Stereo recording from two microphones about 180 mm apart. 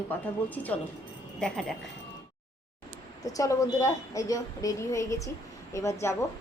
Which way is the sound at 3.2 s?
20° left (ahead or behind).